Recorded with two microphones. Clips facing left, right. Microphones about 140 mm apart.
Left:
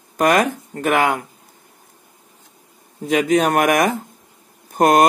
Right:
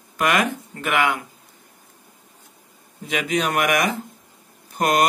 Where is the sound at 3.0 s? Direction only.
45° left (ahead or behind).